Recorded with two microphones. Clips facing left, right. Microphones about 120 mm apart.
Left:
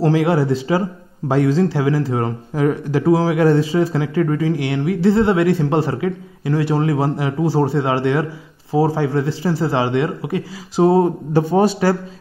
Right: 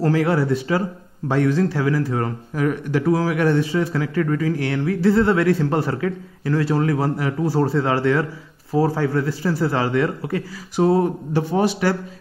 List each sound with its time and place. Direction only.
0.0 s speech: 20° left (ahead or behind)
11.6 s a man's voice: 35° left (ahead or behind)